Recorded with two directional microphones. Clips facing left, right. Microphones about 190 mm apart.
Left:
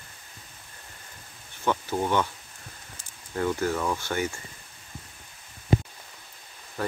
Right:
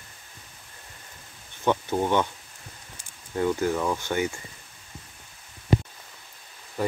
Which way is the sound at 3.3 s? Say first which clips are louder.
Right 2 dB; 15° right (ahead or behind).